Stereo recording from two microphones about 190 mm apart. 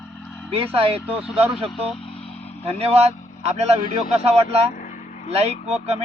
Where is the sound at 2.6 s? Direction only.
30° right (ahead or behind).